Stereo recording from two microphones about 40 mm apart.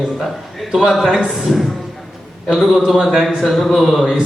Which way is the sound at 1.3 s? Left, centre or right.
Centre.